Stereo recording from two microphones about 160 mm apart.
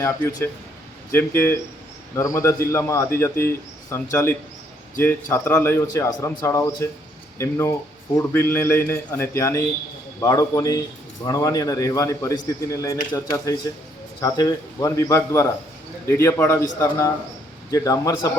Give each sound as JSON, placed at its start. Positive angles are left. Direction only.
{"t": 0.0, "sound": "a man's voice", "side_deg": 20}